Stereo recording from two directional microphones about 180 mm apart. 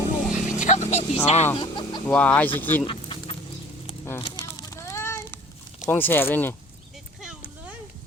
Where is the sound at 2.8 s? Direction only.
30° left (ahead or behind).